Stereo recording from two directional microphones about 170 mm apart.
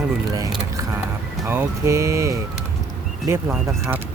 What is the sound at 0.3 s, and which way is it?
Speech, 20° right (ahead or behind).